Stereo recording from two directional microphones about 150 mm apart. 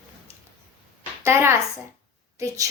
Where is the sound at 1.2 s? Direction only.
15° right (ahead or behind).